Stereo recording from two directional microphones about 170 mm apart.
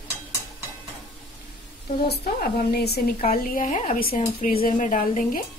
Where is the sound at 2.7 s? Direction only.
65° left (ahead or behind); by 4.5 s 45° left (ahead or behind).